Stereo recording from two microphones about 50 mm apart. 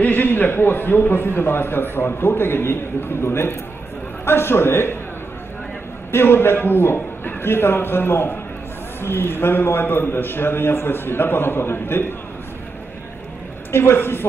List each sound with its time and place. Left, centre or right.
0.0 s a man's voice: left
6.1 s a man's voice: left
13.7 s a man's voice: left